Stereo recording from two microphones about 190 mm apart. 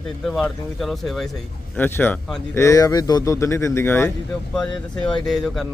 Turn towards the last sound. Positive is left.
turn(degrees=0)  # may be behind; listen again after turning